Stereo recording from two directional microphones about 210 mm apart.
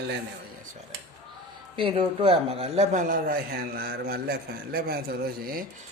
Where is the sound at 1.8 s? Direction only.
25° right (ahead or behind); by 5.6 s 45° right (ahead or behind).